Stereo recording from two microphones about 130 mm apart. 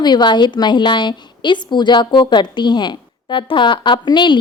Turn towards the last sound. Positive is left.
turn(degrees=35)  # may be behind; listen again after turning